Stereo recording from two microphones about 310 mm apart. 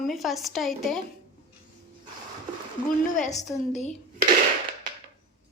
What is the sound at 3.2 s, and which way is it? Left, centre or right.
Speech, left.